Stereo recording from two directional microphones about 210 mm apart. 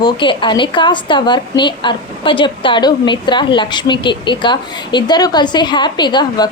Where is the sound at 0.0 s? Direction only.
25° left (ahead or behind).